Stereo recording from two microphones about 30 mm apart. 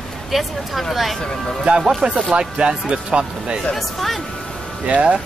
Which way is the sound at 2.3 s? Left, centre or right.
Right.